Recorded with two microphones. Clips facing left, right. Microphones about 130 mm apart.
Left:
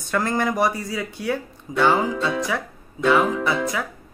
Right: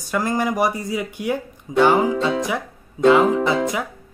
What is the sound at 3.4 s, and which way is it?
Speech, 20° right (ahead or behind).